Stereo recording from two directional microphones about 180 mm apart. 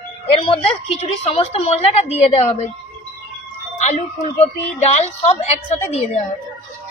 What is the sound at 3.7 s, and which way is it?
A woman's voice, 40° left (ahead or behind).